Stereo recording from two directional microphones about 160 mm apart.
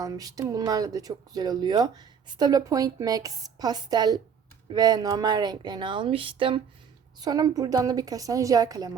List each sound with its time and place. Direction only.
0.0 s speech: 20° right (ahead or behind)
7.2 s speech: 25° right (ahead or behind)